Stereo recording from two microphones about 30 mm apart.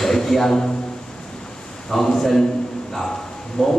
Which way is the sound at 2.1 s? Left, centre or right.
Centre.